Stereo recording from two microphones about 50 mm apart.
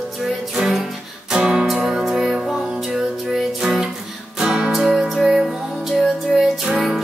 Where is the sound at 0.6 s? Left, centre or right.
Centre.